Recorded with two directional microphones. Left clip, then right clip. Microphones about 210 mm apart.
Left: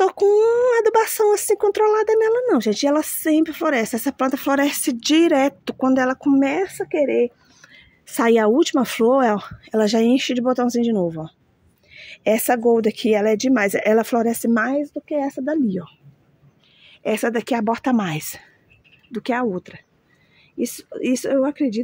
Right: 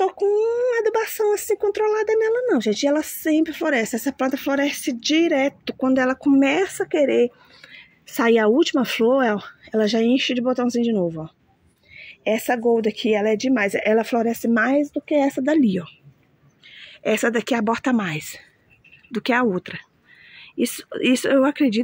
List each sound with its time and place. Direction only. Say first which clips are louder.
0.0 s speech: left 4 dB; 25° left (ahead or behind)
6.2 s speech: right 1 dB; 5° right (ahead or behind)
11.9 s speech: left 3 dB; 15° left (ahead or behind)
14.7 s a woman's voice: right 3 dB; 20° right (ahead or behind)
15.6 s speech: right 2 dB; 5° right (ahead or behind)
19.2 s speech: right 2 dB; 5° right (ahead or behind)